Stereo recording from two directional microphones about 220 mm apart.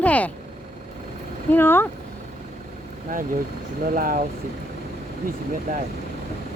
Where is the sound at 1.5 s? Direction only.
10° left (ahead or behind).